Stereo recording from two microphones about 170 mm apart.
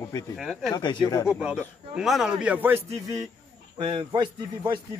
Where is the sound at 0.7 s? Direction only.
25° left (ahead or behind).